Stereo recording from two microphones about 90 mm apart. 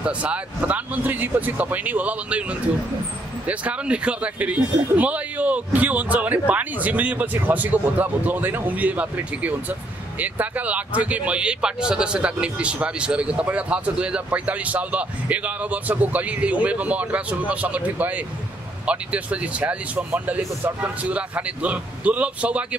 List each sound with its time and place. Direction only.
0.0 s speech: 15° right (ahead or behind)
3.4 s speech: 15° right (ahead or behind)